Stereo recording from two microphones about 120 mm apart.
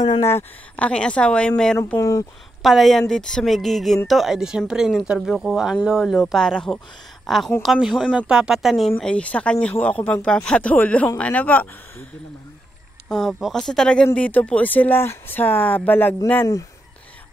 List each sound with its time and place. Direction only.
0.2 s speech: 20° left (ahead or behind)
2.0 s speech: 30° left (ahead or behind)
2.6 s a woman's voice: centre (ahead or behind)
9.0 s speech: 10° left (ahead or behind)
13.1 s a woman's voice: centre (ahead or behind)